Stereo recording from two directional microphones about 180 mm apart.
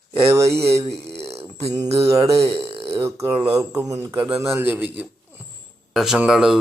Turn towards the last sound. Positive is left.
turn(degrees=-5)  # may be behind; listen again after turning